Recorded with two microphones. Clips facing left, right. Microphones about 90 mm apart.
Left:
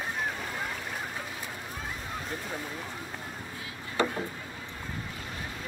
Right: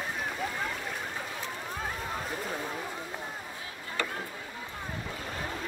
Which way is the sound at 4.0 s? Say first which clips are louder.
Left 6 dB; 20° left (ahead or behind).